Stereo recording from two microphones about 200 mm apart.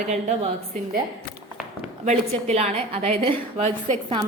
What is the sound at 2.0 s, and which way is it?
A woman's voice, 35° right (ahead or behind).